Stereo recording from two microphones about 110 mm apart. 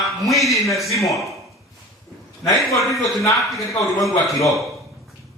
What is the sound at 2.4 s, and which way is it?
Speech, 30° left (ahead or behind).